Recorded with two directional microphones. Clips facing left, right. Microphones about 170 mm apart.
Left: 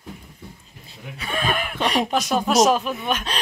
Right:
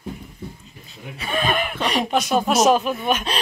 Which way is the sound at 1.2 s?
Centre (ahead or behind).